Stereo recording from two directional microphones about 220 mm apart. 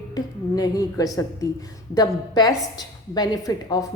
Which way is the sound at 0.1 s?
15° left (ahead or behind).